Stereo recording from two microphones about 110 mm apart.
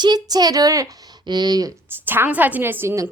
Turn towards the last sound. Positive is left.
turn(degrees=-20)  # may be behind; listen again after turning